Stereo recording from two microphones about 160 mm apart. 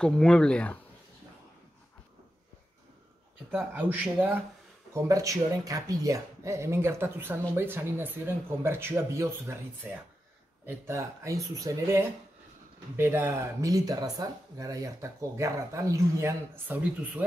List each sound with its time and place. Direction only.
0.0 s speech: 5° left (ahead or behind)
3.5 s speech: 10° right (ahead or behind)